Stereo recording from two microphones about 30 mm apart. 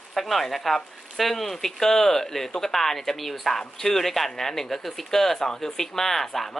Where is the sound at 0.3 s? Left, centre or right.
Centre.